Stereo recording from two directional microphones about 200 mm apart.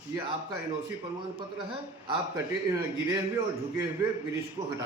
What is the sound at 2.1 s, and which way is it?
Speech, 20° right (ahead or behind).